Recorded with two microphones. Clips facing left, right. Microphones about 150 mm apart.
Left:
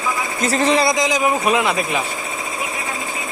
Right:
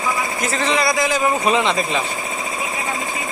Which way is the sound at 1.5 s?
5° left (ahead or behind).